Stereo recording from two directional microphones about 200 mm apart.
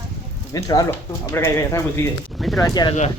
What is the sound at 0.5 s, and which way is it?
Speech, 20° left (ahead or behind).